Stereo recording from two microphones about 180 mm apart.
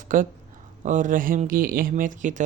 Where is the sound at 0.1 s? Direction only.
50° right (ahead or behind).